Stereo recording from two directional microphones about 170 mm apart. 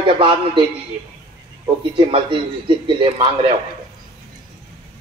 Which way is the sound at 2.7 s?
30° right (ahead or behind).